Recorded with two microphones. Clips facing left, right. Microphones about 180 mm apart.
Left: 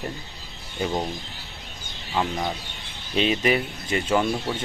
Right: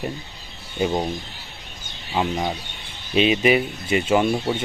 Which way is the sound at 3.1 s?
15° right (ahead or behind).